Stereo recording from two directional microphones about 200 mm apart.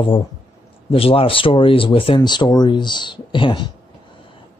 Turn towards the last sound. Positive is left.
turn(degrees=25)  # may be behind; listen again after turning